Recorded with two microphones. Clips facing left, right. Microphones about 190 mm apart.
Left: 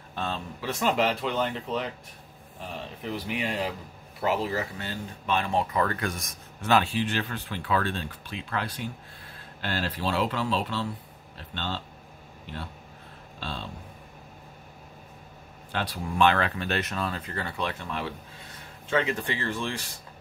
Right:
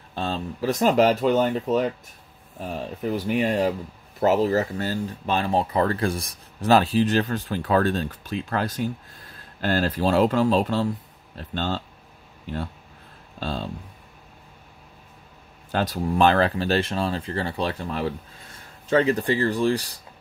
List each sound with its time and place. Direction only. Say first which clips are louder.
0.1 s speech: right 5 dB; 35° right (ahead or behind)
13.4 s speech: right 7 dB; 40° right (ahead or behind)
15.7 s speech: right 7 dB; 40° right (ahead or behind)